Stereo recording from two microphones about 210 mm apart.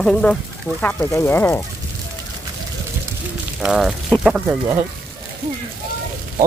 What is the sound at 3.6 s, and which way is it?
Speech, centre (ahead or behind).